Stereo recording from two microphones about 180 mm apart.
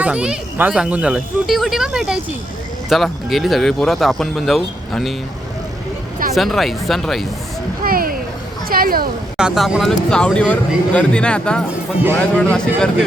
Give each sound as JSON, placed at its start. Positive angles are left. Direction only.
{"t": 0.0, "sound": "speech", "side_deg": -5}
{"t": 6.3, "sound": "speech", "side_deg": 0}
{"t": 7.9, "sound": "vehicle", "side_deg": -55}
{"t": 8.7, "sound": "speech", "side_deg": -55}
{"t": 9.4, "sound": "speech", "side_deg": -5}